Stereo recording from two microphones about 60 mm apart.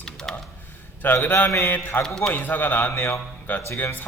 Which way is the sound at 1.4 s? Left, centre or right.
Left.